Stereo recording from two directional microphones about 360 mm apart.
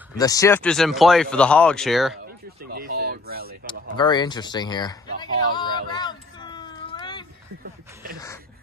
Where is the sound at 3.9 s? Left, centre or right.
Centre.